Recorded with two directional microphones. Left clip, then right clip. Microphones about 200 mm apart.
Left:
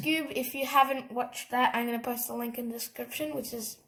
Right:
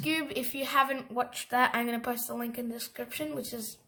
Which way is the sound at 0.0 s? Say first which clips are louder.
Left 1 dB; 20° right (ahead or behind).